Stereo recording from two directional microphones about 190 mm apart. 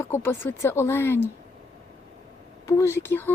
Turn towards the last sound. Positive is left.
turn(degrees=10)  # may be behind; listen again after turning